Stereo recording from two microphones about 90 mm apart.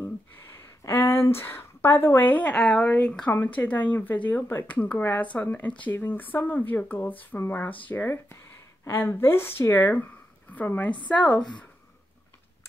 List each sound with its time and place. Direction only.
0.8 s a woman's voice: 25° left (ahead or behind)